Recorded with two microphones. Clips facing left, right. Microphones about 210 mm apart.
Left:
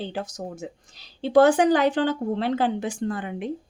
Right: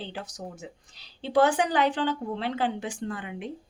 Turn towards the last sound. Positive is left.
turn(degrees=45)  # may be behind; listen again after turning